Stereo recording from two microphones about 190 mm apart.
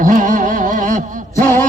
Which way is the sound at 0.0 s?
45° right (ahead or behind).